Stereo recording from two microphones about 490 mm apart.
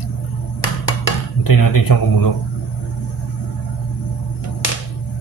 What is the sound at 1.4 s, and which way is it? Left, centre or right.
Speech, left.